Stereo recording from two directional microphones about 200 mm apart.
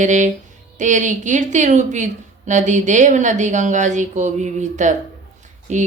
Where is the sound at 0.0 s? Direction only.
40° right (ahead or behind).